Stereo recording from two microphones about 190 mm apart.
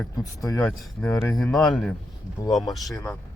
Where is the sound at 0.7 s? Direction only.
Centre (ahead or behind).